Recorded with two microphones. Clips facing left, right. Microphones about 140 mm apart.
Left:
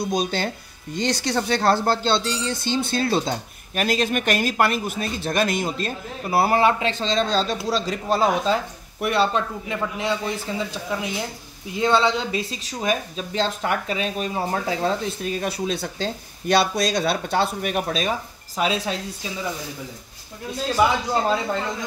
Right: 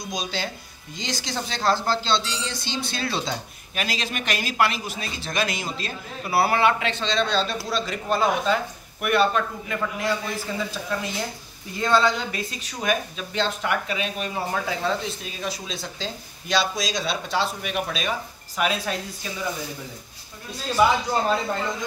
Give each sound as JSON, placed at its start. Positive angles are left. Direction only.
{"t": 0.0, "sound": "a woman's voice", "side_deg": 55}
{"t": 18.6, "sound": "a man's voice", "side_deg": 25}